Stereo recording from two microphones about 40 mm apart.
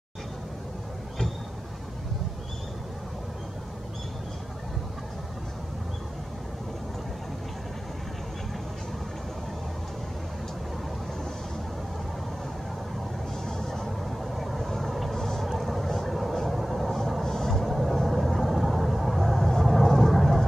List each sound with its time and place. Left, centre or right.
13.5 s vehicle: centre
15.4 s vehicle: centre